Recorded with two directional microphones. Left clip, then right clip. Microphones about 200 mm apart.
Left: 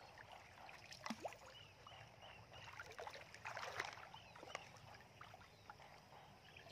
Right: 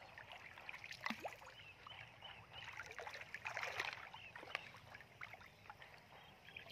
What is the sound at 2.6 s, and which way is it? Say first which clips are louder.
Rowboat: right 2 dB; 25° right (ahead or behind).